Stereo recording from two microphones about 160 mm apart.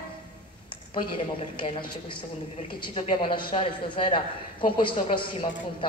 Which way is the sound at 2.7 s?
35° left (ahead or behind).